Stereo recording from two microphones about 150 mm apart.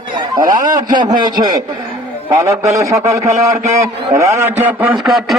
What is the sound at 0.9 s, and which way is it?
A man's voice, 30° right (ahead or behind).